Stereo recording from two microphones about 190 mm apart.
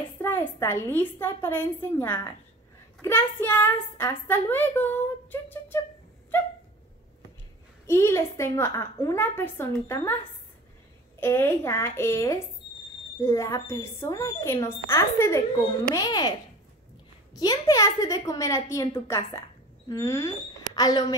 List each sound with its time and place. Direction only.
0.2 s speech: 15° left (ahead or behind)
7.8 s speech: 15° left (ahead or behind)
11.1 s a woman's voice: 10° left (ahead or behind)